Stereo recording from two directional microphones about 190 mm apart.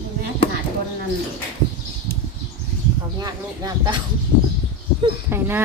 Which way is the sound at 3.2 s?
20° right (ahead or behind).